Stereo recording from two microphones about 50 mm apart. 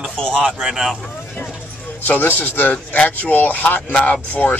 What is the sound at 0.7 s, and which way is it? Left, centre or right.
Speech, centre.